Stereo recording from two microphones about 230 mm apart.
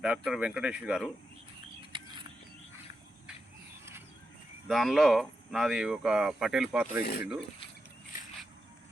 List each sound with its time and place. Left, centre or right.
0.0 s speech: centre
1.9 s a sound: right
4.7 s speech: centre
7.0 s speech: left